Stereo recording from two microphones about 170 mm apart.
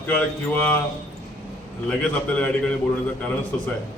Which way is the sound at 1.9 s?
5° left (ahead or behind).